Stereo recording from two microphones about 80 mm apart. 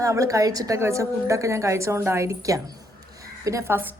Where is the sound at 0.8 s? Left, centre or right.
Right.